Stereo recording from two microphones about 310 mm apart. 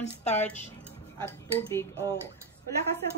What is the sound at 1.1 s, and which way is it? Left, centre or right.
A woman's voice, centre.